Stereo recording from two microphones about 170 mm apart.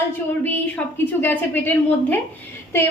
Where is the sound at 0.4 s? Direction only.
10° left (ahead or behind).